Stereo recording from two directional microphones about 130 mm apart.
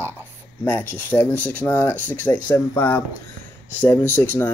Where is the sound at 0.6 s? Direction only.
15° left (ahead or behind).